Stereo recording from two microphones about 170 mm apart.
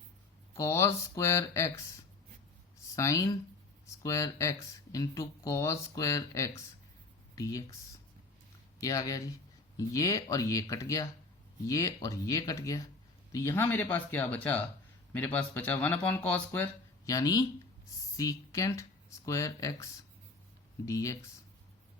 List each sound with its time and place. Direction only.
0.5 s speech: 15° left (ahead or behind)
2.9 s speech: 20° left (ahead or behind)
8.8 s speech: 20° left (ahead or behind)
17.1 s speech: 20° left (ahead or behind)